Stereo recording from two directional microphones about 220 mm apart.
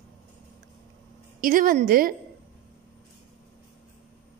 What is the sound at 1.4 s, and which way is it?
Speech, 40° right (ahead or behind).